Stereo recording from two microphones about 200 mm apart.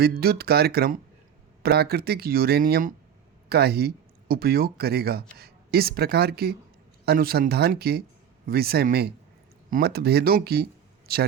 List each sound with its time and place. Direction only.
0.0 s speech: 50° right (ahead or behind)